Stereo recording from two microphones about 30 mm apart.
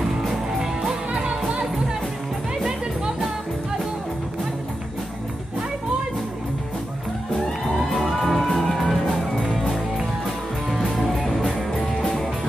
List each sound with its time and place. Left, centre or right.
1.1 s music: right
7.7 s music: centre